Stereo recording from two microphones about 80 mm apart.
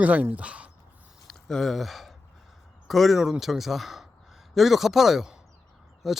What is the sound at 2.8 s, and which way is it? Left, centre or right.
Speech, centre.